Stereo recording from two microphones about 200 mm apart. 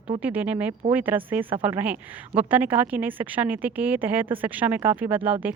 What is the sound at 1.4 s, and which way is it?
Speech, 25° right (ahead or behind).